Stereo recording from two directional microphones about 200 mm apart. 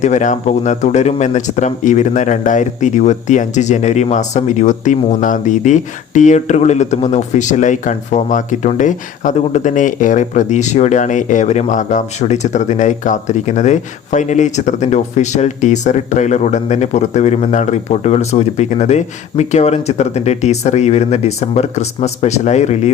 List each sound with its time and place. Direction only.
0.0 s speech: 35° left (ahead or behind)